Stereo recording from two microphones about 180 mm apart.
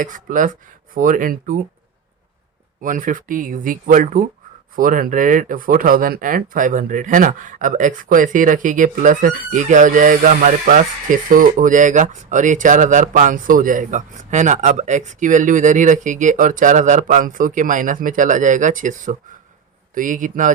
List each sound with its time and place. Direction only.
0.0 s speech: 45° right (ahead or behind)
2.8 s speech: 50° right (ahead or behind)